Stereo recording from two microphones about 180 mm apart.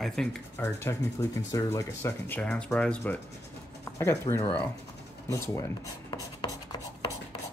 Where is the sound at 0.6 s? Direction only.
15° left (ahead or behind).